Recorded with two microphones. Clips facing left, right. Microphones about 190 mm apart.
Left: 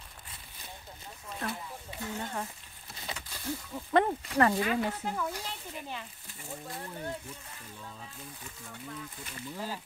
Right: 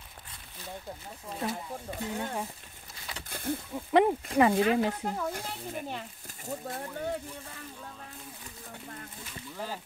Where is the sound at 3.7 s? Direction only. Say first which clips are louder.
Right 3 dB; 15° right (ahead or behind).